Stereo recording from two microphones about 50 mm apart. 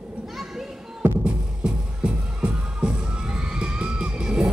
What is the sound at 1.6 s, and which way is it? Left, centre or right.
Music, centre.